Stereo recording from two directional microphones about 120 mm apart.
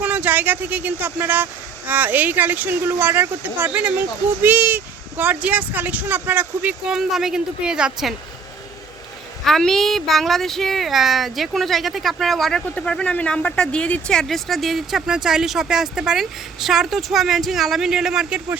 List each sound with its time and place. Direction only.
0.0 s speech: 15° right (ahead or behind)
9.4 s speech: 5° left (ahead or behind)